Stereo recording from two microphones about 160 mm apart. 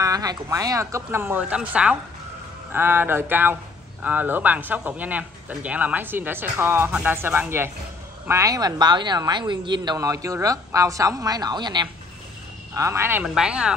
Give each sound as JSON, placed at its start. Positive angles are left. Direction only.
{"t": 0.0, "sound": "a man's voice", "side_deg": -20}
{"t": 12.7, "sound": "speech", "side_deg": -15}
{"t": 13.2, "sound": "speech", "side_deg": -5}